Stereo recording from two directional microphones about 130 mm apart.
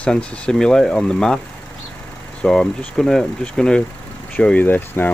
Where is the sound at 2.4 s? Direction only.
5° left (ahead or behind).